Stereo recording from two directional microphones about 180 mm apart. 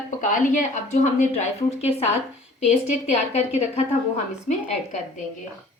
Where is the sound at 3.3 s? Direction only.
35° left (ahead or behind).